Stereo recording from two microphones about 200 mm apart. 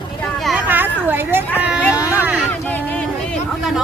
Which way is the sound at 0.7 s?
10° right (ahead or behind).